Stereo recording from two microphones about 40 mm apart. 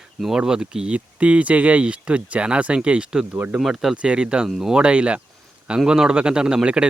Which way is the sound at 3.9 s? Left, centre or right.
Right.